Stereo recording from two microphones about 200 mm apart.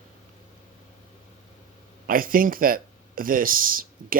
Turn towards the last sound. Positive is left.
turn(degrees=-45)  # may be behind; listen again after turning